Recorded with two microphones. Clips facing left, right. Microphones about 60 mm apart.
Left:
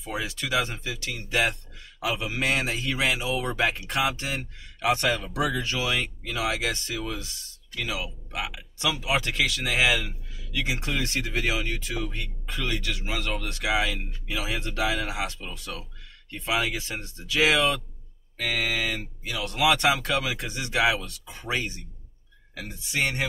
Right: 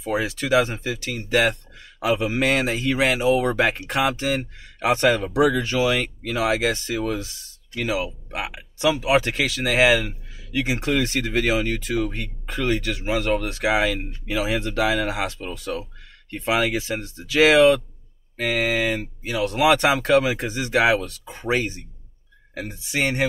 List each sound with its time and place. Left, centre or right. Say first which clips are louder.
0.0 s speech: right 7 dB; right